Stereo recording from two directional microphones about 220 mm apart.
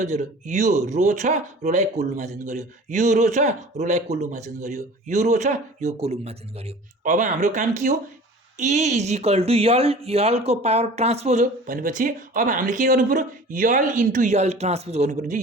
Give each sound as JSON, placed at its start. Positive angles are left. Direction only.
{"t": 0.0, "sound": "speech", "side_deg": -35}